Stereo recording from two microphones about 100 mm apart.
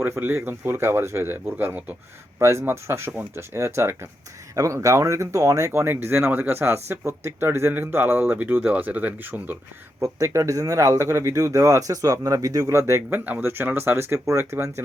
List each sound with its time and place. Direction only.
0.0 s speech: 20° right (ahead or behind)
10.0 s speech: 30° right (ahead or behind)